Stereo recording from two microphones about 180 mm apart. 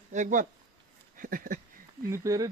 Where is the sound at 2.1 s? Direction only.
20° right (ahead or behind).